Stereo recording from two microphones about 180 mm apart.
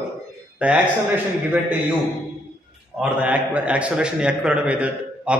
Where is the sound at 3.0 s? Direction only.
5° right (ahead or behind).